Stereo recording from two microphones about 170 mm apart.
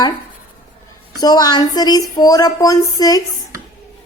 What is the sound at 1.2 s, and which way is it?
A woman's voice, 20° left (ahead or behind).